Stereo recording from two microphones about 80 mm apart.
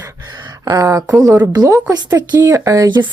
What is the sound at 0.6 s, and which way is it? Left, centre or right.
Speech, right.